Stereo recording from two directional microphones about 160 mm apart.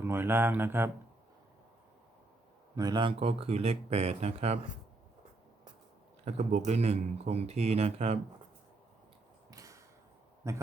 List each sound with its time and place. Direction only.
0.0 s speech: 15° right (ahead or behind)
2.7 s speech: 25° right (ahead or behind); by 4.6 s 45° right (ahead or behind)
6.2 s a man's voice: 45° right (ahead or behind)
9.5 s a sound: 20° right (ahead or behind)
10.4 s speech: 15° right (ahead or behind)